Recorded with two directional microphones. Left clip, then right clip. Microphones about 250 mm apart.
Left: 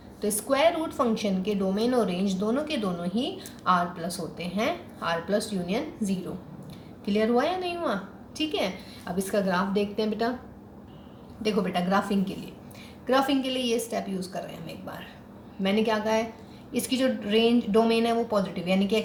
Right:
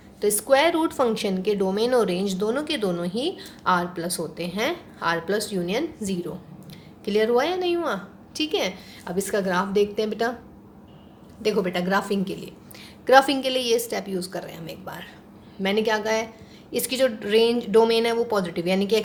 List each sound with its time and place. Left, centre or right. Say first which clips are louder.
0.2 s a woman's voice: right 5 dB; right
11.4 s a woman's voice: right 3 dB; right